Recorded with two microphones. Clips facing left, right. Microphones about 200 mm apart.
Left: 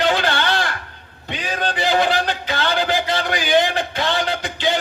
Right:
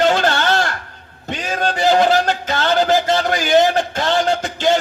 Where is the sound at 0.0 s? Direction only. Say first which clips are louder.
Right 3 dB; 45° right (ahead or behind).